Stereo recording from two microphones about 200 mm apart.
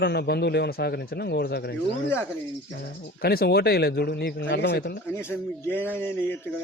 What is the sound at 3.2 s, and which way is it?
Speech, 50° left (ahead or behind).